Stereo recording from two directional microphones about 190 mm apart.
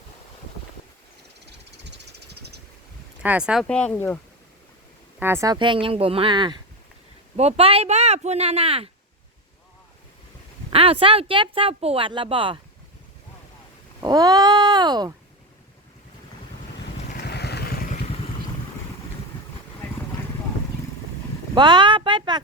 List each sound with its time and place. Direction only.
1.9 s vehicle: 60° right (ahead or behind)
3.2 s speech: 5° right (ahead or behind)
5.2 s speech: 15° right (ahead or behind); by 8.9 s 30° right (ahead or behind)
10.7 s speech: 30° right (ahead or behind)
14.0 s speech: 20° right (ahead or behind)
17.2 s vehicle: 60° left (ahead or behind); by 18.2 s 35° left (ahead or behind)
21.5 s speech: 25° right (ahead or behind)